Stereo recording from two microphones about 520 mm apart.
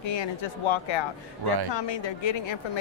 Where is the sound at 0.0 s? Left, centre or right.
Left.